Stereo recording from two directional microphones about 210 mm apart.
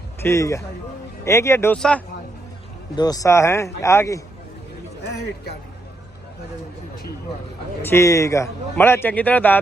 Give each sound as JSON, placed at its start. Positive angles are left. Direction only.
{"t": 0.2, "sound": "speech", "side_deg": 15}
{"t": 2.9, "sound": "speech", "side_deg": 20}
{"t": 7.8, "sound": "speech", "side_deg": 10}